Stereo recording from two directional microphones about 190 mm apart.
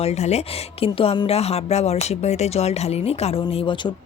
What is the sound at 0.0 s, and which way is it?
Speech, 35° left (ahead or behind).